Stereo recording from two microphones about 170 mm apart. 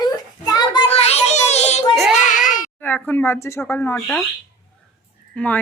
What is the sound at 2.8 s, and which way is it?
Speech, 10° left (ahead or behind).